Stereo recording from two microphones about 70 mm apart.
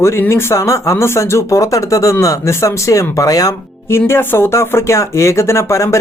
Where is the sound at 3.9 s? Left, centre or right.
Left.